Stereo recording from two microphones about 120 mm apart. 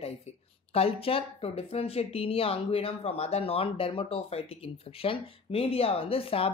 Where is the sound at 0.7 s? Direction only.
50° left (ahead or behind).